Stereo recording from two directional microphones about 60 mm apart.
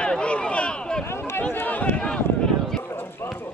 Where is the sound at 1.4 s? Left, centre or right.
Left.